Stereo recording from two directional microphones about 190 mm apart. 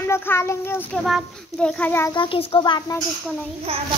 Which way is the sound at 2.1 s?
25° left (ahead or behind).